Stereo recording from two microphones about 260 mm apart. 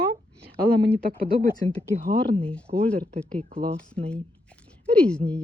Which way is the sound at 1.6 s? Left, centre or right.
Right.